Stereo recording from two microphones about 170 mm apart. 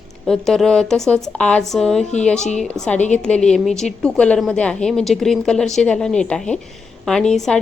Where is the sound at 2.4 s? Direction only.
45° left (ahead or behind).